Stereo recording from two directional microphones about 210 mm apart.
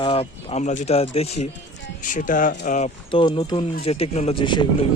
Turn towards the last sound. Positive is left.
turn(degrees=20)  # may be behind; listen again after turning